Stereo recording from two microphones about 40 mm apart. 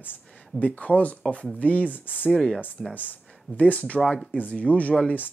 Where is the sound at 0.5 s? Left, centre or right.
Left.